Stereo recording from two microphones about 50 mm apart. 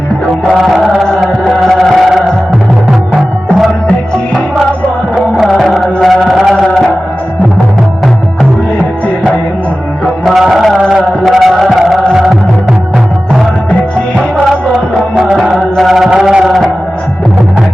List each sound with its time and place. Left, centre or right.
0.4 s music: centre
1.0 s music: centre
3.8 s music: centre
5.5 s music: centre
10.2 s music: centre
15.7 s chant: centre
16.1 s a sound: centre